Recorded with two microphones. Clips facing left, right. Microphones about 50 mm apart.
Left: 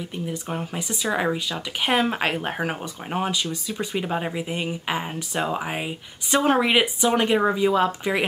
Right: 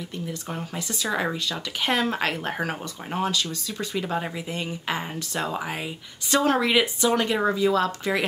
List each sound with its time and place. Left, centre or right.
0.3 s speech: centre